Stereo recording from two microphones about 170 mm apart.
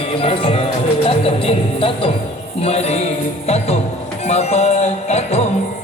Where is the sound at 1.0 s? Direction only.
35° left (ahead or behind).